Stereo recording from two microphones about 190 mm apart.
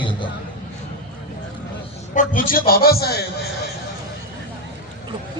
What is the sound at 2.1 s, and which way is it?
A man's voice, 45° left (ahead or behind).